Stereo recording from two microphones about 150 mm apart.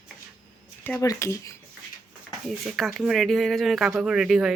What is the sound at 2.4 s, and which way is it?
Speech, centre (ahead or behind).